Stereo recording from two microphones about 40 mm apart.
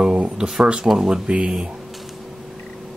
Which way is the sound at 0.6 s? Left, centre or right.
Centre.